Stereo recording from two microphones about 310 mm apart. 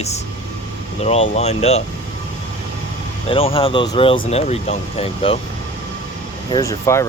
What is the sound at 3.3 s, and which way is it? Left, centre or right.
Speech, centre.